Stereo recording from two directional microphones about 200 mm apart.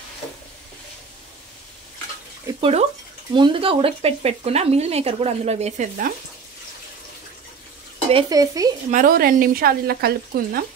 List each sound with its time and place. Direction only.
2.4 s speech: 30° right (ahead or behind)
8.1 s stir: 20° right (ahead or behind)
8.9 s speech: 45° right (ahead or behind)